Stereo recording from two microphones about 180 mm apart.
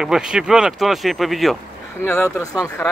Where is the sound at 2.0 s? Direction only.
15° left (ahead or behind).